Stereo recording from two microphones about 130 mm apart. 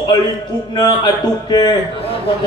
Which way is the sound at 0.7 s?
35° left (ahead or behind).